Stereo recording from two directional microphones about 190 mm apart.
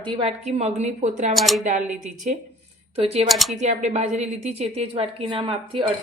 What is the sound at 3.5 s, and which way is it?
Speech, 35° right (ahead or behind).